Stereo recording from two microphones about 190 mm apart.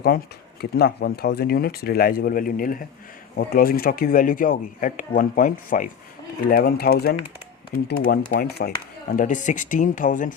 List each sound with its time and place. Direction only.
0.6 s speech: 55° left (ahead or behind)
9.1 s speech: 40° left (ahead or behind)